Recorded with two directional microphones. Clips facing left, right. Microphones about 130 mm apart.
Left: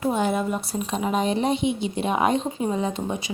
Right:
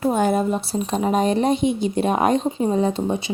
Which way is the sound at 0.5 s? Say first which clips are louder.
Right 4 dB; 30° right (ahead or behind).